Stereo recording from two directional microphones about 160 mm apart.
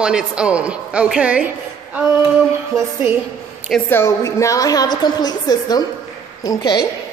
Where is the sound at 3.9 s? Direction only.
15° left (ahead or behind).